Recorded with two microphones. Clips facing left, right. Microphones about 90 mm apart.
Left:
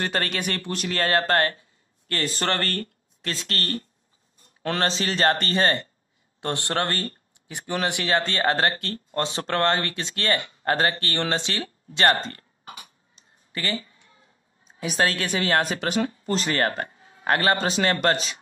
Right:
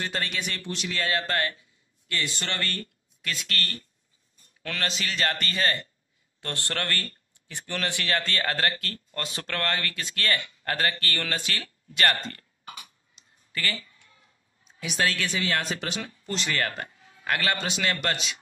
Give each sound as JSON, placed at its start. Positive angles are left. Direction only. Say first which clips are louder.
{"t": 0.0, "sound": "speech", "louder": "left 5 dB", "side_deg": 55}
{"t": 6.4, "sound": "a man's voice", "louder": "left 6 dB", "side_deg": 20}